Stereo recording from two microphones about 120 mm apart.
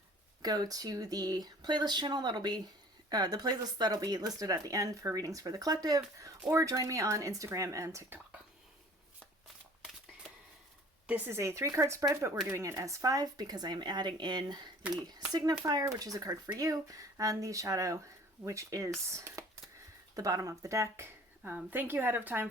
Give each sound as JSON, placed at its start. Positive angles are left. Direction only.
{"t": 0.4, "sound": "speech", "side_deg": -35}
{"t": 11.0, "sound": "speech", "side_deg": -10}
{"t": 11.3, "sound": "speech", "side_deg": -25}